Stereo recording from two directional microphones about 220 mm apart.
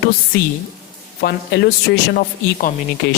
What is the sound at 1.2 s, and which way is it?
Speech, 45° left (ahead or behind).